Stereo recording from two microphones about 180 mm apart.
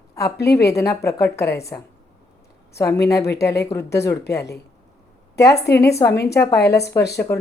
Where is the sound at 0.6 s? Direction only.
15° left (ahead or behind).